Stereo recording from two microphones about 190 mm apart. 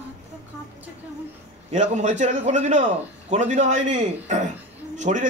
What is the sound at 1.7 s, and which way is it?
A man's voice, 40° right (ahead or behind).